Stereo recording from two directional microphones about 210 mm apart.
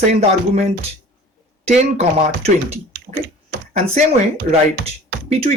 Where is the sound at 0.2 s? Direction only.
30° right (ahead or behind).